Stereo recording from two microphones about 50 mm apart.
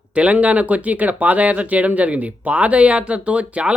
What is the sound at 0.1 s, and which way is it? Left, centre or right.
A man's voice, right.